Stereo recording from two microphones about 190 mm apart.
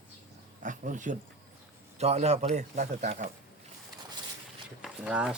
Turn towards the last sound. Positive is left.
turn(degrees=-5)  # may be behind; listen again after turning